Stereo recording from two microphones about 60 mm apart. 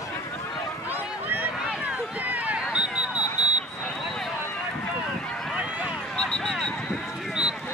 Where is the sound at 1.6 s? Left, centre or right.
Centre.